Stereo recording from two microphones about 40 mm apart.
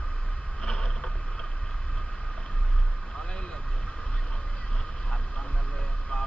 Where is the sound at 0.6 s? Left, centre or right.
Centre.